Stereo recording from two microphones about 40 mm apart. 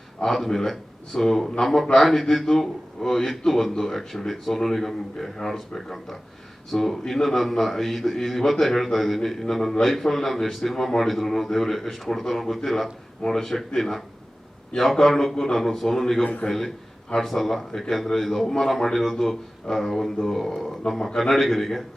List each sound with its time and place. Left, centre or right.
0.3 s a man's voice: centre
16.2 s a man's voice: left
16.5 s a man's voice: centre